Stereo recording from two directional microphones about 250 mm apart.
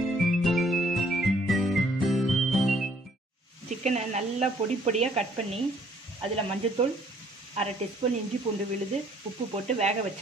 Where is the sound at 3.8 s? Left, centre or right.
Right.